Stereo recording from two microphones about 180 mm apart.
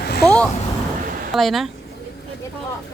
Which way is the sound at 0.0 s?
60° left (ahead or behind).